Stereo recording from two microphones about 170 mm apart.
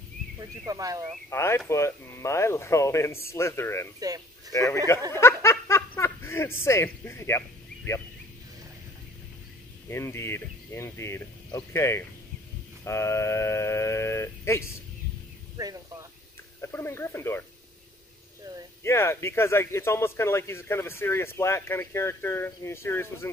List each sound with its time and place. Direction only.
0.4 s speech: 20° right (ahead or behind)
1.3 s speech: 15° left (ahead or behind)
9.8 s speech: 15° left (ahead or behind)
15.5 s speech: 20° right (ahead or behind)
16.6 s speech: 15° left (ahead or behind)
18.8 s speech: 15° left (ahead or behind)